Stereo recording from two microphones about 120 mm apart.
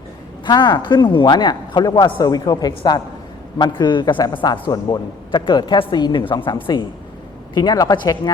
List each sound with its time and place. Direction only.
0.4 s a woman's voice: 35° left (ahead or behind)